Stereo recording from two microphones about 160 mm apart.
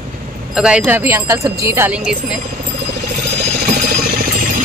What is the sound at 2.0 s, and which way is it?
Speech, 5° right (ahead or behind).